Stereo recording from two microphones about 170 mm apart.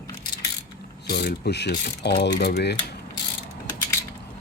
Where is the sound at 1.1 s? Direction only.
75° left (ahead or behind).